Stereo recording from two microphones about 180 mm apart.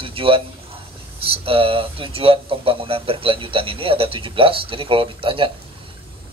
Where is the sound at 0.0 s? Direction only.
30° right (ahead or behind).